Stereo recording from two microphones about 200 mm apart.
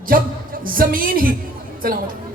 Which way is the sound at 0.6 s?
45° right (ahead or behind).